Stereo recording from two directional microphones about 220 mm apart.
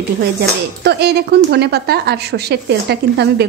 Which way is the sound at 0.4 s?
45° right (ahead or behind).